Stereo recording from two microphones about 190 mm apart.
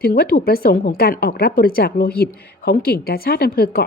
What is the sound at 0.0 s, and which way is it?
A woman's voice, 55° left (ahead or behind).